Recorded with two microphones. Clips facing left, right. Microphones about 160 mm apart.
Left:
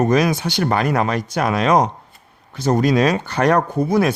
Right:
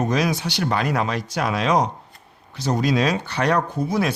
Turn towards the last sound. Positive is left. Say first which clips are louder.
# left 5 dB
turn(degrees=55)  # may be behind; listen again after turning